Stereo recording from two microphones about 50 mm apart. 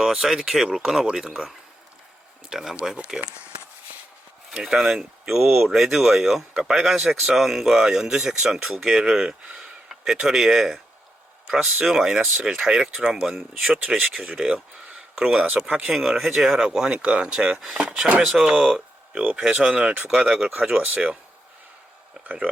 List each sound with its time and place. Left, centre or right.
0.0 s speech: centre
2.5 s speech: centre
4.8 s speech: centre
15.4 s speech: right
16.0 s speech: centre
18.4 s speech: centre
20.1 s speech: centre
22.2 s a sound: right